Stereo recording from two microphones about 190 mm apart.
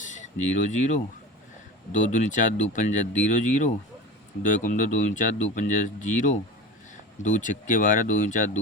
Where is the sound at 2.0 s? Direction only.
40° left (ahead or behind).